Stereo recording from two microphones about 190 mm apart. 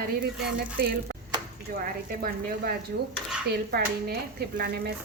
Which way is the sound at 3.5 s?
60° right (ahead or behind).